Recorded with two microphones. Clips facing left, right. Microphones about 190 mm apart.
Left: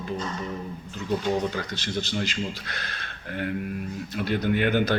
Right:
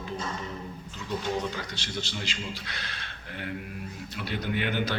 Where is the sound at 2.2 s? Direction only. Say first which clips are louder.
Left 5 dB; 50° left (ahead or behind).